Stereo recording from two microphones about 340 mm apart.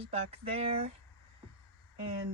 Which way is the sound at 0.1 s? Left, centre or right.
Centre.